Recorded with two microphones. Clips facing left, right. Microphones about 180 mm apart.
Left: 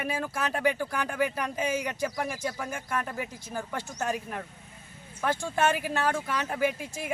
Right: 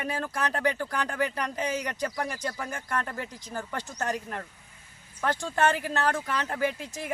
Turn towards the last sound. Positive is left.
turn(degrees=10)  # may be behind; listen again after turning